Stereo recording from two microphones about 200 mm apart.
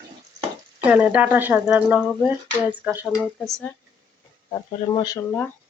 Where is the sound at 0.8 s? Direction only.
5° right (ahead or behind).